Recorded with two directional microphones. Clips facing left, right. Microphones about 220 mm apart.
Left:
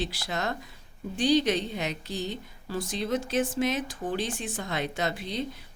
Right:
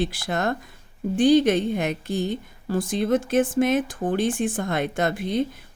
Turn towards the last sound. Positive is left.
turn(degrees=-50)  # may be behind; listen again after turning